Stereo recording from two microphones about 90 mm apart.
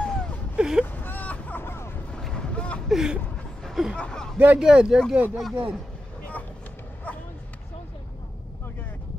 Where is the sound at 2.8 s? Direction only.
5° right (ahead or behind).